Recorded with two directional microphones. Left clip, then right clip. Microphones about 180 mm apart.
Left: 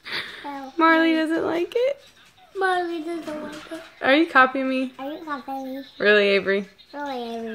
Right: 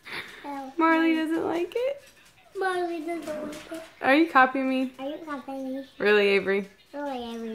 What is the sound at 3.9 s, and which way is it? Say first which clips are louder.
Speech: left 3 dB; 10° left (ahead or behind).